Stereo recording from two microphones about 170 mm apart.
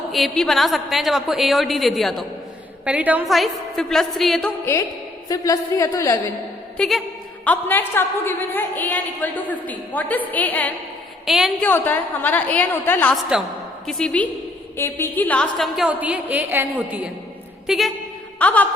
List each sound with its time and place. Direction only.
0.1 s a woman's voice: centre (ahead or behind)
4.6 s a woman's voice: 15° left (ahead or behind)
6.7 s a woman's voice: centre (ahead or behind)
11.3 s a woman's voice: centre (ahead or behind)
11.6 s a woman's voice: 10° left (ahead or behind); by 17.1 s 10° right (ahead or behind)
17.7 s a woman's voice: centre (ahead or behind)